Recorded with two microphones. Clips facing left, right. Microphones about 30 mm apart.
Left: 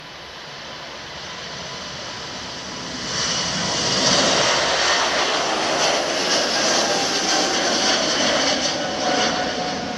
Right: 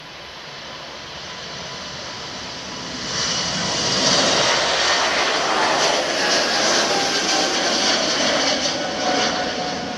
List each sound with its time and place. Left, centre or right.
3.1 s vehicle: centre
5.5 s vehicle: right
5.8 s vehicle: centre